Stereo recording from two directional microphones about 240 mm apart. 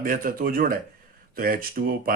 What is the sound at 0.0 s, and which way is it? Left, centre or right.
Speech, right.